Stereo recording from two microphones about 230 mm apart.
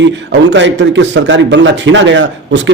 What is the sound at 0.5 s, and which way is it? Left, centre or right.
A man's voice, right.